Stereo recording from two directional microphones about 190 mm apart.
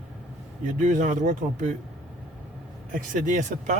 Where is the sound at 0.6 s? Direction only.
40° right (ahead or behind).